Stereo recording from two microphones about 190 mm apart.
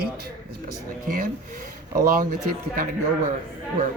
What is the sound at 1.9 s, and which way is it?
Speech, 45° right (ahead or behind).